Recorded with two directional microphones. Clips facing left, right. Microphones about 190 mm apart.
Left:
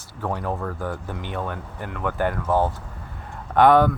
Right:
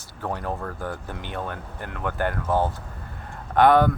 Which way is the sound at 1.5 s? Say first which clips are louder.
Left 2 dB; 15° left (ahead or behind).